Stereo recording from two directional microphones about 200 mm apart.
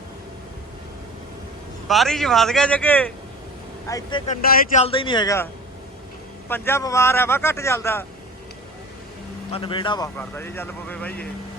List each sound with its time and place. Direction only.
1.9 s speech: centre (ahead or behind); by 4.2 s 15° left (ahead or behind)
4.3 s speech: 40° left (ahead or behind)
4.8 s speech: 25° left (ahead or behind)
6.5 s speech: 10° left (ahead or behind)
9.5 s speech: 25° left (ahead or behind)
10.2 s speech: 10° left (ahead or behind)